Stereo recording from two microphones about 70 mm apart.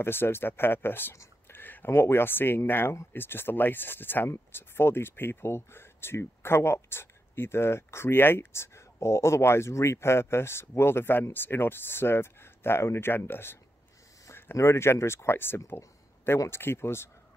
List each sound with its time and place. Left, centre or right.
0.0 s speech: left
1.5 s a sound: left
1.9 s speech: left